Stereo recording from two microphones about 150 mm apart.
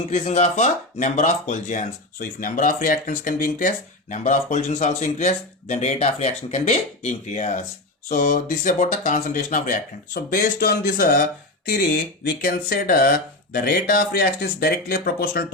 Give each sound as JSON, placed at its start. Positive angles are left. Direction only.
{"t": 0.1, "sound": "speech", "side_deg": 45}